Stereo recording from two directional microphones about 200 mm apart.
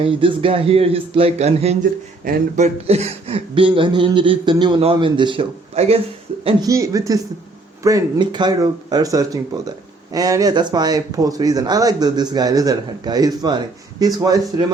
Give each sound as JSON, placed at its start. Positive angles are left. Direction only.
{"t": 0.0, "sound": "speech", "side_deg": -25}
{"t": 2.2, "sound": "speech", "side_deg": -45}
{"t": 2.8, "sound": "speech", "side_deg": -30}